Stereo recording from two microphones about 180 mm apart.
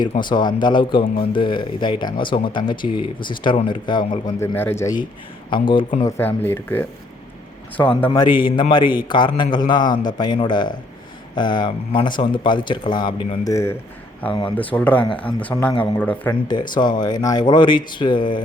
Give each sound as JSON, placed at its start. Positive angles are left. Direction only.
{"t": 0.1, "sound": "speech", "side_deg": 25}
{"t": 4.4, "sound": "speech", "side_deg": 10}
{"t": 8.1, "sound": "speech", "side_deg": 25}
{"t": 16.5, "sound": "speech", "side_deg": 25}